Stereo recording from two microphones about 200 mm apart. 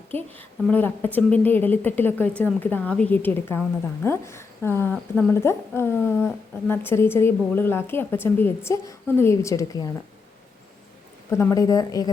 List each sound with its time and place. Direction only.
0.1 s a woman's voice: 10° left (ahead or behind)
11.3 s a woman's voice: 15° left (ahead or behind)